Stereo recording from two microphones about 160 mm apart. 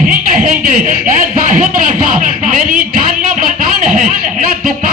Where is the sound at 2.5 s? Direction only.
60° right (ahead or behind).